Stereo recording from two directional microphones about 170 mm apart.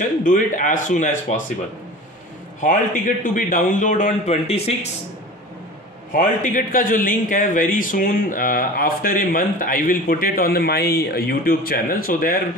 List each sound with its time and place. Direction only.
0.2 s a man's voice: 50° left (ahead or behind)
2.6 s a man's voice: 50° left (ahead or behind)
6.1 s a man's voice: 50° left (ahead or behind)